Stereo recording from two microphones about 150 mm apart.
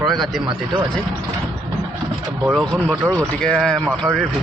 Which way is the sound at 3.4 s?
5° left (ahead or behind).